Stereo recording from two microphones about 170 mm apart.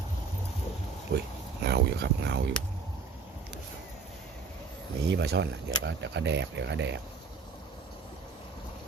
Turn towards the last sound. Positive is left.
turn(degrees=-90)